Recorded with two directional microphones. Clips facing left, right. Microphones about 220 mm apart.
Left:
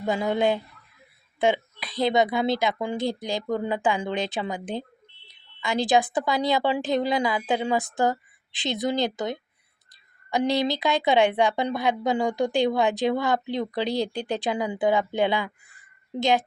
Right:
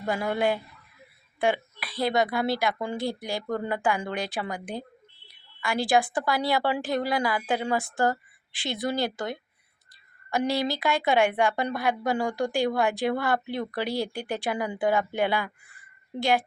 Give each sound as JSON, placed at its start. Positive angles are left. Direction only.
{"t": 0.1, "sound": "a woman's voice", "side_deg": 20}
{"t": 1.4, "sound": "a sound", "side_deg": 20}
{"t": 2.0, "sound": "a woman's voice", "side_deg": 20}